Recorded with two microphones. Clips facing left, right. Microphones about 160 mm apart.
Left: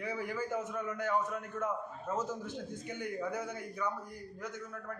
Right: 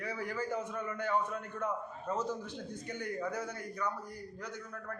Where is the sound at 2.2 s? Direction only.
45° left (ahead or behind).